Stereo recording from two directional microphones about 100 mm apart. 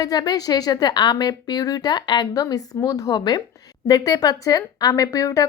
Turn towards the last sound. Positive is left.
turn(degrees=35)  # may be behind; listen again after turning